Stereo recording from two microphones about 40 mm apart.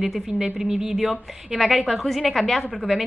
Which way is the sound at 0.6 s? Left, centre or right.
Centre.